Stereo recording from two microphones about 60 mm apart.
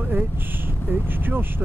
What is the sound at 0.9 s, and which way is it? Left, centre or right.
Speech, right.